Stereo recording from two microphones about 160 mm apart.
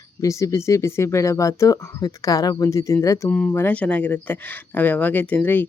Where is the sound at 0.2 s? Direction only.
20° left (ahead or behind).